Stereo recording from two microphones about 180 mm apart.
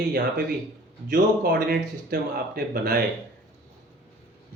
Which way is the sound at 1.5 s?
65° right (ahead or behind).